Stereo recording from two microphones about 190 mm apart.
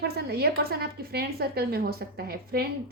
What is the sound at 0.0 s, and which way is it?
A woman's voice, 60° right (ahead or behind).